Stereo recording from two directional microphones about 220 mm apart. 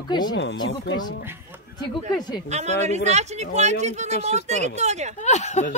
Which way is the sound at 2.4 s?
30° right (ahead or behind).